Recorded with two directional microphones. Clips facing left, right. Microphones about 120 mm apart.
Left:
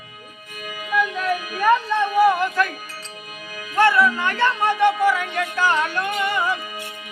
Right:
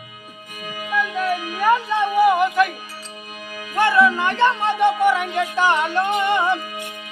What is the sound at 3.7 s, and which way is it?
Music, 20° right (ahead or behind).